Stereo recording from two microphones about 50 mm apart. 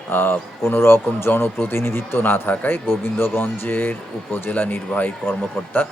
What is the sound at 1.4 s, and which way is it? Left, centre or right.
Speech, left.